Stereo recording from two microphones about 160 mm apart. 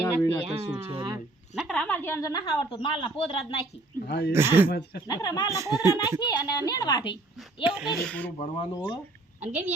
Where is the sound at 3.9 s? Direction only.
85° left.